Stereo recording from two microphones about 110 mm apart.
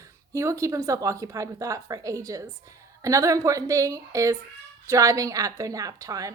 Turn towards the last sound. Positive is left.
turn(degrees=-30)  # may be behind; listen again after turning